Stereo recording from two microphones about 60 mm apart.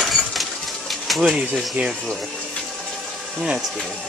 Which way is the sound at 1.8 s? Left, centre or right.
Right.